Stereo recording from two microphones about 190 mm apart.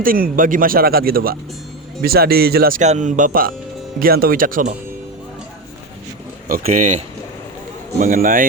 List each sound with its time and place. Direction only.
0.0 s speech: 50° right (ahead or behind)
6.5 s speech: 45° right (ahead or behind)